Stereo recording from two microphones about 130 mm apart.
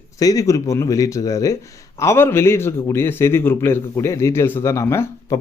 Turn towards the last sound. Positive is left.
turn(degrees=20)  # may be behind; listen again after turning